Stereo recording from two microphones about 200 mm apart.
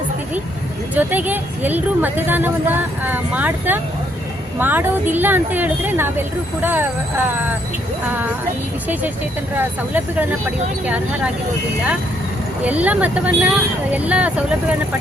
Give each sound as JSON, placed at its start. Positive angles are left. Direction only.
{"t": 0.9, "sound": "a woman's voice", "side_deg": -10}
{"t": 9.6, "sound": "a woman's voice", "side_deg": -10}
{"t": 12.6, "sound": "a woman's voice", "side_deg": -5}